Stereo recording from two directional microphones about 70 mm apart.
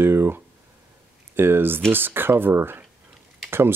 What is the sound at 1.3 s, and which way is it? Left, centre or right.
Speech, right.